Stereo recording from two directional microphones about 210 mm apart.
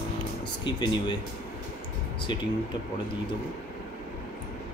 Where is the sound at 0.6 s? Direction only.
20° left (ahead or behind).